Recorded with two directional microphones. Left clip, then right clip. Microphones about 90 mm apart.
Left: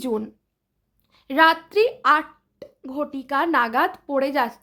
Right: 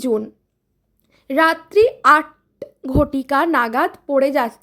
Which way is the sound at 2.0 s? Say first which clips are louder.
Right 6 dB; 65° right (ahead or behind).